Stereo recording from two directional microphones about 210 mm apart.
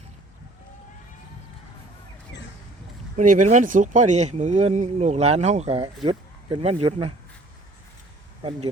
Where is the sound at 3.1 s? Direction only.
35° right (ahead or behind).